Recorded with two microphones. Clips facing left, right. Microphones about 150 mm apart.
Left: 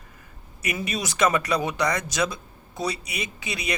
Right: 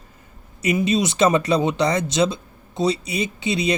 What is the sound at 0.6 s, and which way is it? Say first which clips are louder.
Speech: right 10 dB; 25° right (ahead or behind).